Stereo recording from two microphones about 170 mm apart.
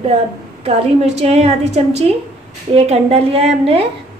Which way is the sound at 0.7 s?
35° right (ahead or behind).